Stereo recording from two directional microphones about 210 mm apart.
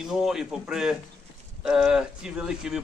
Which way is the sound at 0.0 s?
Centre (ahead or behind).